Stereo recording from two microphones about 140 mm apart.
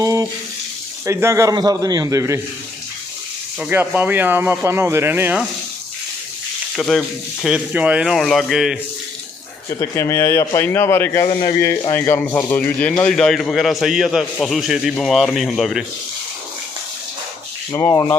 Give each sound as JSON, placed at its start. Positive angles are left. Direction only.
{"t": 0.0, "sound": "a sound", "side_deg": -20}
{"t": 1.0, "sound": "a man's voice", "side_deg": -20}
{"t": 3.6, "sound": "speech", "side_deg": -15}
{"t": 6.7, "sound": "speech", "side_deg": 5}
{"t": 7.4, "sound": "speech", "side_deg": -10}
{"t": 9.6, "sound": "speech", "side_deg": 25}
{"t": 11.3, "sound": "speech", "side_deg": 35}
{"t": 11.5, "sound": "speech", "side_deg": 90}
{"t": 11.9, "sound": "a man's voice", "side_deg": 15}
{"t": 17.7, "sound": "speech", "side_deg": 25}